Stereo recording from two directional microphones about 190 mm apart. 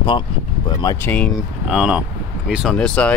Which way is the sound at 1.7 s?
5° right (ahead or behind).